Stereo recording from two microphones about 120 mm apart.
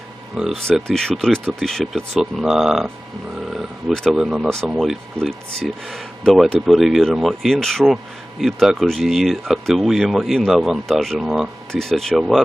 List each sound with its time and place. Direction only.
0.3 s speech: centre (ahead or behind)
3.4 s wild animals: centre (ahead or behind)
4.7 s speech: centre (ahead or behind)